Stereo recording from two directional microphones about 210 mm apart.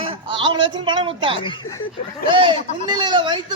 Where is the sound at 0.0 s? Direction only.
25° right (ahead or behind).